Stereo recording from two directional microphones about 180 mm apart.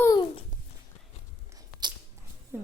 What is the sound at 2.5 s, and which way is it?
Speech, 15° right (ahead or behind).